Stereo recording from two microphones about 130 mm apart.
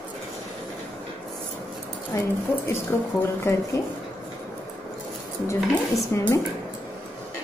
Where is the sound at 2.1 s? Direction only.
20° left (ahead or behind).